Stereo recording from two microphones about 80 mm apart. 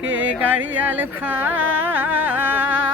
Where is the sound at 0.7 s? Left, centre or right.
Right.